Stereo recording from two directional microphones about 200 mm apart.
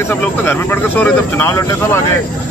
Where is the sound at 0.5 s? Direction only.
10° left (ahead or behind).